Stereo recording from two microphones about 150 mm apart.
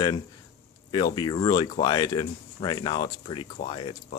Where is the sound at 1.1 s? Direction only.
30° left (ahead or behind).